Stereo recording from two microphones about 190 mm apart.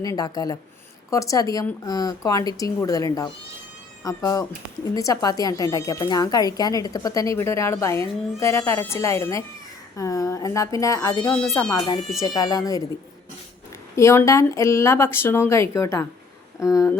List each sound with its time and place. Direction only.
0.0 s speech: 20° left (ahead or behind)
13.9 s speech: 15° left (ahead or behind)